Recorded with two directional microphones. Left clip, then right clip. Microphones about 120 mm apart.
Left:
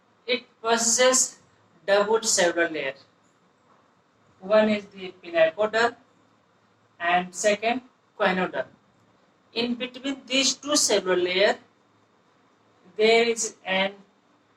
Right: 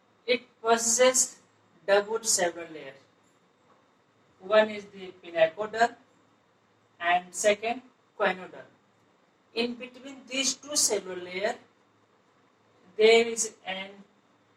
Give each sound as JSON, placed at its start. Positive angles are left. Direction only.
{"t": 0.3, "sound": "a woman's voice", "side_deg": 30}
{"t": 4.4, "sound": "a woman's voice", "side_deg": 30}
{"t": 13.0, "sound": "speech", "side_deg": 30}